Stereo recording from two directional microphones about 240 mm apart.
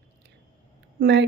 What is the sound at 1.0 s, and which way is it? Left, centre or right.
Speech, right.